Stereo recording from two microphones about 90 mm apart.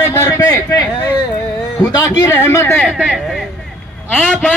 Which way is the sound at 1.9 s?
45° left (ahead or behind).